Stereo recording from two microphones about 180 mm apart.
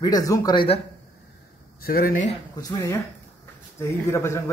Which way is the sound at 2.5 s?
20° left (ahead or behind).